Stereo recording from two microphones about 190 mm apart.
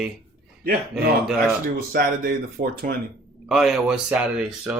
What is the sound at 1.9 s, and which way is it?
Speech, 50° right (ahead or behind).